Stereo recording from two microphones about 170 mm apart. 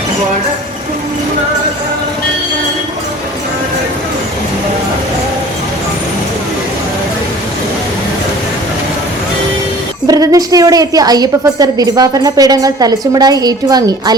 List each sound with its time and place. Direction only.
10.1 s a woman's voice: 20° right (ahead or behind)